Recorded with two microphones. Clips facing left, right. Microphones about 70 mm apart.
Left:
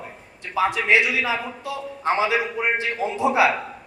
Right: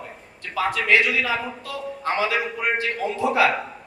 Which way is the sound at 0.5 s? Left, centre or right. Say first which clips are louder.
Left 1 dB; left.